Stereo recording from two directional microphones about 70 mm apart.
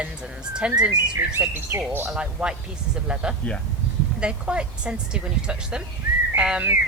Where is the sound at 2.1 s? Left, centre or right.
Centre.